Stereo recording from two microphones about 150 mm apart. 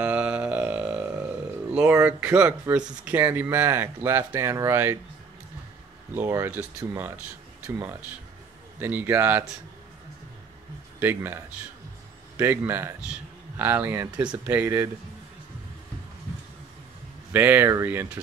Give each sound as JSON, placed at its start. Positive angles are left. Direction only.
{"t": 0.0, "sound": "a sound", "side_deg": -10}
{"t": 2.7, "sound": "speech", "side_deg": -10}
{"t": 6.1, "sound": "speech", "side_deg": -15}
{"t": 11.0, "sound": "speech", "side_deg": -15}
{"t": 12.4, "sound": "speech", "side_deg": -15}
{"t": 17.3, "sound": "speech", "side_deg": -10}